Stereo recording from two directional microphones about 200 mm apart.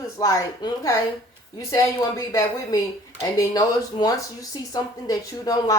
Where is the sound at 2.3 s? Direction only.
15° left (ahead or behind).